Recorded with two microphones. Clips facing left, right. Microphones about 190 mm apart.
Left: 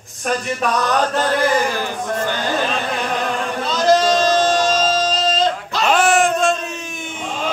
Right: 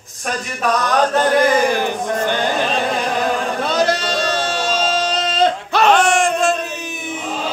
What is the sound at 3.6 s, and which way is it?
Music, 60° right (ahead or behind).